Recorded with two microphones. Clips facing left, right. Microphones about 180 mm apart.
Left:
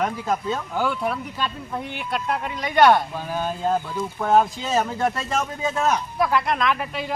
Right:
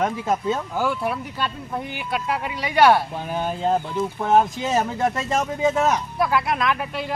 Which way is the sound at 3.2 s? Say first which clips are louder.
Right 1 dB; 20° right (ahead or behind).